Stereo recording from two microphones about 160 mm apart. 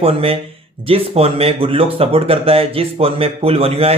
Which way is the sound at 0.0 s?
35° right (ahead or behind).